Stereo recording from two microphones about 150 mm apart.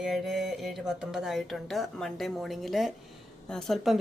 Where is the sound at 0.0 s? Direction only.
5° right (ahead or behind).